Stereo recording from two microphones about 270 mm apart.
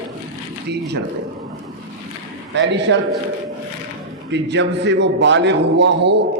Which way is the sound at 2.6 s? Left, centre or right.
Right.